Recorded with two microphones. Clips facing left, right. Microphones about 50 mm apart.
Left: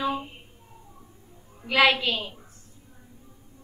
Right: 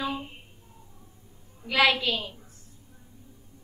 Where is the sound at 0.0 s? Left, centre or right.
Left.